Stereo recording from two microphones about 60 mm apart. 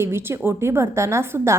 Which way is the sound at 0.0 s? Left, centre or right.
Right.